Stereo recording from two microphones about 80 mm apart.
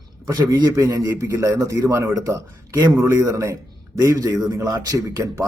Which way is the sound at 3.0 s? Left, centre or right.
Right.